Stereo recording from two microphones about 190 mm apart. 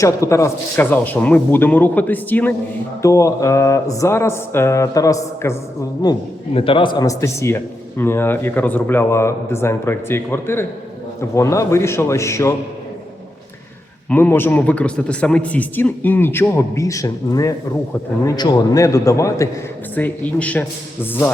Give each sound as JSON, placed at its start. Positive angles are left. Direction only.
{"t": 0.0, "sound": "a man's voice", "side_deg": 15}
{"t": 14.1, "sound": "a man's voice", "side_deg": 10}